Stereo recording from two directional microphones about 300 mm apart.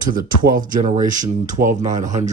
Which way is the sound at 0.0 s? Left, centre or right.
Right.